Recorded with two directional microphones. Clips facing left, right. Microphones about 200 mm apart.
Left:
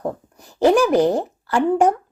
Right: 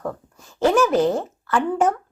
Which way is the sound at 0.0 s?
20° left (ahead or behind).